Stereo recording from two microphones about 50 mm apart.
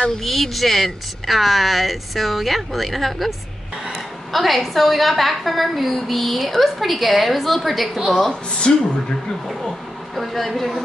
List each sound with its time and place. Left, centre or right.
0.2 s a woman's voice: centre
8.5 s speech: left
9.5 s speech: centre